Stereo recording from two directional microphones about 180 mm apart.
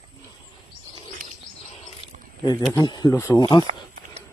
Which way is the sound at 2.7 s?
20° left (ahead or behind).